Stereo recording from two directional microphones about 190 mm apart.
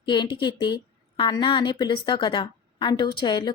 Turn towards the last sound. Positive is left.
turn(degrees=25)  # may be behind; listen again after turning